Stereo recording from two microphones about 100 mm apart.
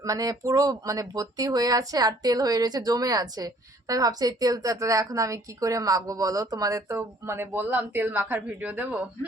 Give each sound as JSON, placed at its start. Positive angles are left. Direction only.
{"t": 0.0, "sound": "speech", "side_deg": -35}